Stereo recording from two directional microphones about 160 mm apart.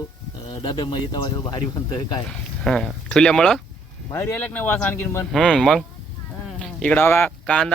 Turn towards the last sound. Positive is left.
turn(degrees=5)  # may be behind; listen again after turning